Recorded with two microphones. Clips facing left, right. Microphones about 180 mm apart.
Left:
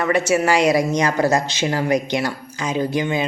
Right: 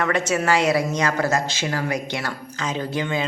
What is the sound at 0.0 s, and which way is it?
Speech, 10° left (ahead or behind).